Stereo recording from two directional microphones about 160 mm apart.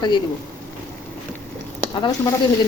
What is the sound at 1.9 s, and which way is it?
Speech, 25° left (ahead or behind).